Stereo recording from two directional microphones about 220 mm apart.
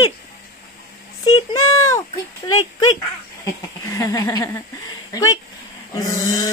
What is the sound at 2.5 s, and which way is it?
Speech, 70° left (ahead or behind).